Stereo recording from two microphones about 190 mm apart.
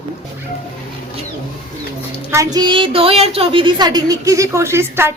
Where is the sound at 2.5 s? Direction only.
25° right (ahead or behind).